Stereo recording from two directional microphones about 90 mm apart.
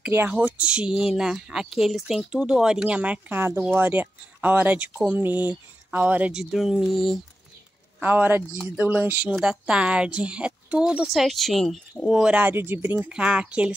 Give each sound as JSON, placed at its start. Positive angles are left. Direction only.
{"t": 0.0, "sound": "speech", "side_deg": -15}
{"t": 6.5, "sound": "speech", "side_deg": -5}
{"t": 8.0, "sound": "speech", "side_deg": -20}
{"t": 9.4, "sound": "speech", "side_deg": -10}
{"t": 12.5, "sound": "speech", "side_deg": -25}
{"t": 13.1, "sound": "speech", "side_deg": -10}